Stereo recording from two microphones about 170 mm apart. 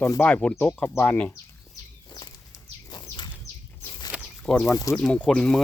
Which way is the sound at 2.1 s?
20° left (ahead or behind).